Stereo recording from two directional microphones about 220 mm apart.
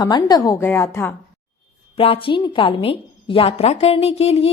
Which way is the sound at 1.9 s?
25° left (ahead or behind).